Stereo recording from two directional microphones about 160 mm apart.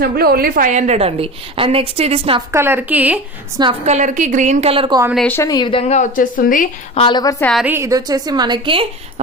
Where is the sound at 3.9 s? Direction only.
50° right (ahead or behind); by 5.0 s 35° right (ahead or behind).